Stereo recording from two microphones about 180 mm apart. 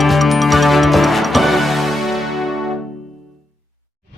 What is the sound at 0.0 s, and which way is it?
Music, centre (ahead or behind).